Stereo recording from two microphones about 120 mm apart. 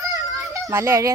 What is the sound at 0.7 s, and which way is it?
Speech, 25° right (ahead or behind).